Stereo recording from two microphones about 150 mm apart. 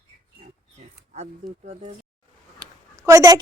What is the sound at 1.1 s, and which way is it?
Speech, 50° right (ahead or behind).